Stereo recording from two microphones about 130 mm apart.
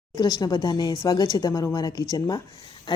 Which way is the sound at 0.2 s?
30° left (ahead or behind).